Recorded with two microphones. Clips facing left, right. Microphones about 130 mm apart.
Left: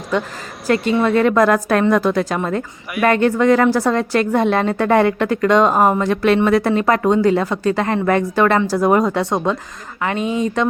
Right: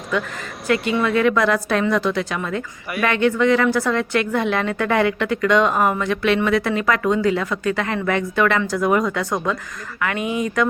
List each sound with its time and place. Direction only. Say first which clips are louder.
0.1 s a woman's voice: left 3 dB; 35° left (ahead or behind)